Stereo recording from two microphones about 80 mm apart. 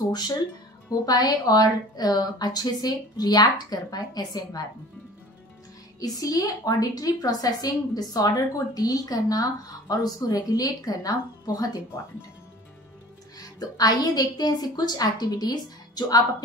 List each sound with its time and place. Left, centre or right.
0.1 s a woman's voice: left
5.9 s a woman's voice: left
13.4 s a woman's voice: left